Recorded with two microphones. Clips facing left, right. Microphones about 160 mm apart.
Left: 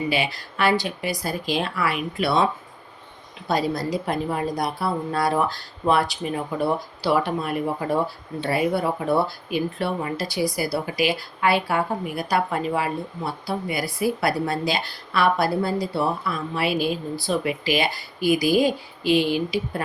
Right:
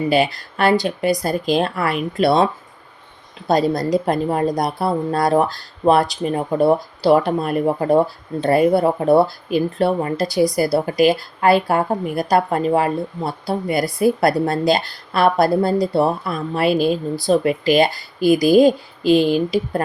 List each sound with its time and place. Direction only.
0.1 s speech: 45° right (ahead or behind)
2.1 s a woman's voice: 35° right (ahead or behind)
3.7 s a woman's voice: 40° right (ahead or behind)